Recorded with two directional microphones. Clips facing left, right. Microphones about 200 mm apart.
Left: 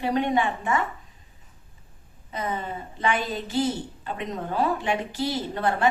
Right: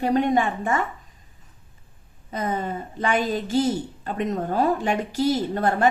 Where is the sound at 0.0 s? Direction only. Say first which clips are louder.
Right 3 dB; 45° right (ahead or behind).